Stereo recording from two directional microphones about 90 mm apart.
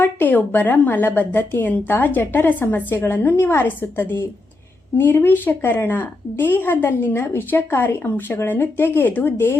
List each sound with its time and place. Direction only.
0.0 s a woman's voice: 20° left (ahead or behind)